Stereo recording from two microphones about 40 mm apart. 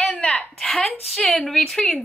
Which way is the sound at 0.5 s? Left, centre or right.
Centre.